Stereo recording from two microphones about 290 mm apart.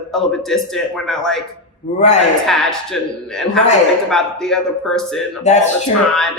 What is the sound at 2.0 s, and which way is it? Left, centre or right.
Speech, left.